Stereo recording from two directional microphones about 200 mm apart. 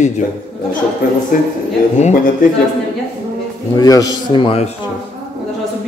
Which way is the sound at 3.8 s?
20° left (ahead or behind).